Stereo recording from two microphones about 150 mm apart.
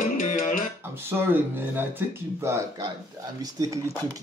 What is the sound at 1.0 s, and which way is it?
Speech, 15° right (ahead or behind).